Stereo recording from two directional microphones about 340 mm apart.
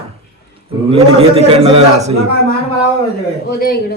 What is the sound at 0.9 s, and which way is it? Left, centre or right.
A man's voice, centre.